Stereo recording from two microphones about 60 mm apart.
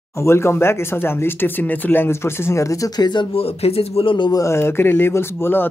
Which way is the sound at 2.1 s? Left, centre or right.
Left.